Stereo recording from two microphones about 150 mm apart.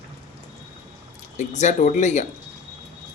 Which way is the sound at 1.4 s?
50° left (ahead or behind).